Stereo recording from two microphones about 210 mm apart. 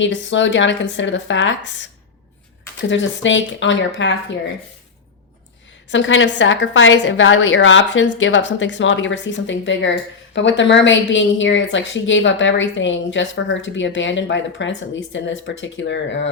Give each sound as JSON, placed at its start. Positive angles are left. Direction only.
{"t": 0.0, "sound": "a woman's voice", "side_deg": 60}
{"t": 2.9, "sound": "a woman's voice", "side_deg": 60}
{"t": 5.9, "sound": "a woman's voice", "side_deg": 60}